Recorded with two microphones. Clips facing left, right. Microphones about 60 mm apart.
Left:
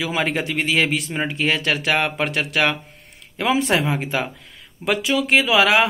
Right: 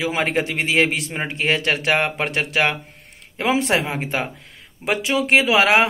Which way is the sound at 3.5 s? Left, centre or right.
Right.